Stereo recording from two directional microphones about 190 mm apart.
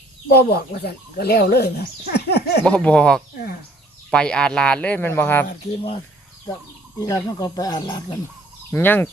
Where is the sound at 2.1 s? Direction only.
60° left (ahead or behind).